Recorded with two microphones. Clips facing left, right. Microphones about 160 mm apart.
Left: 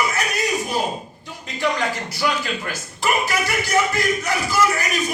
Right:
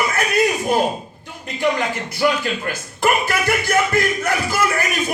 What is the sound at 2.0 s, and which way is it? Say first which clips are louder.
A man's voice: right 4 dB; 50° right (ahead or behind).